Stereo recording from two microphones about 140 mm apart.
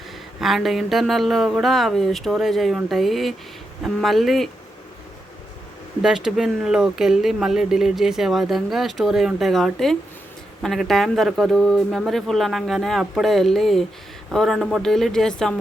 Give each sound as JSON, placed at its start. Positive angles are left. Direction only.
{"t": 0.3, "sound": "speech", "side_deg": 0}
{"t": 6.0, "sound": "speech", "side_deg": -5}